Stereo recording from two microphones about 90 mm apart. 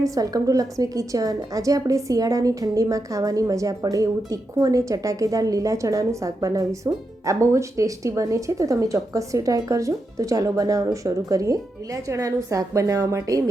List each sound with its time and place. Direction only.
0.0 s a woman's voice: 40° right (ahead or behind)